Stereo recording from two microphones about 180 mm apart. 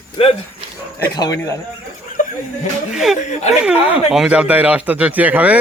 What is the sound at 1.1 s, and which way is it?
Speech, 20° left (ahead or behind).